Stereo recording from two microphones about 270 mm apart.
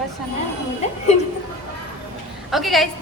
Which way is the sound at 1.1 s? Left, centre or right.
Left.